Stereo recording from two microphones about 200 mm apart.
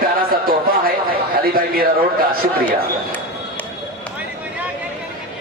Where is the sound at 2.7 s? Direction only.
10° left (ahead or behind).